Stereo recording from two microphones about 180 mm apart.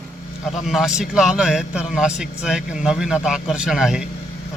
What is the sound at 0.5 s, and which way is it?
A man's voice, centre (ahead or behind).